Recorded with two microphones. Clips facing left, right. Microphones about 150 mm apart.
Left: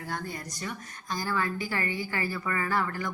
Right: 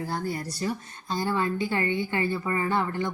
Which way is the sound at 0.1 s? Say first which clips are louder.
Right 5 dB; 30° right (ahead or behind).